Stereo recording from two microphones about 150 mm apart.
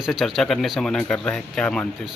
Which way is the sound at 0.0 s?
Centre (ahead or behind).